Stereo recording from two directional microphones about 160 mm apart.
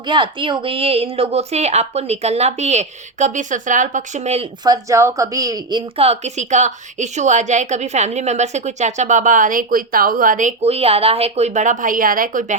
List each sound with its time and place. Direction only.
0.0 s a woman's voice: 30° right (ahead or behind)
4.6 s a woman's voice: 20° right (ahead or behind)
6.1 s a woman's voice: 45° right (ahead or behind)